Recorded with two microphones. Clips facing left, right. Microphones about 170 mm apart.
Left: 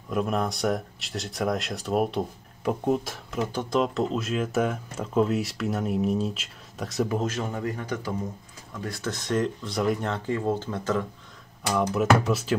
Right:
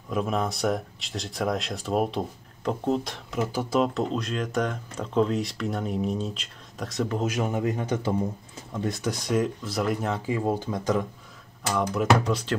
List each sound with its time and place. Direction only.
0.1 s speech: centre (ahead or behind)
7.2 s a man's voice: 15° right (ahead or behind)
11.7 s speech: 5° left (ahead or behind)